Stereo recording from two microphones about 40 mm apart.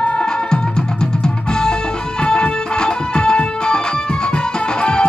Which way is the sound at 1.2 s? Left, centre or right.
Centre.